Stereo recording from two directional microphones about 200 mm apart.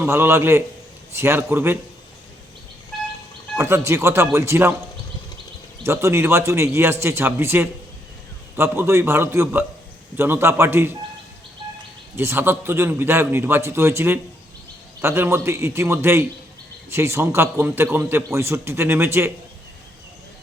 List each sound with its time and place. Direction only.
0.0 s a man's voice: 10° right (ahead or behind)
3.6 s a man's voice: 15° right (ahead or behind)
5.8 s a man's voice: 15° right (ahead or behind)
12.1 s a man's voice: 10° right (ahead or behind)